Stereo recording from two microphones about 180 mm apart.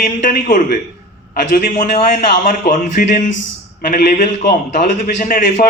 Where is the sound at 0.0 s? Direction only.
50° left (ahead or behind).